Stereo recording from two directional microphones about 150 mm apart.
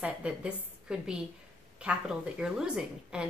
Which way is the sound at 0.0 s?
5° right (ahead or behind).